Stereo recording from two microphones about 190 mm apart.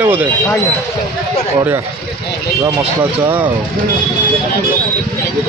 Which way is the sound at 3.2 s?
10° right (ahead or behind).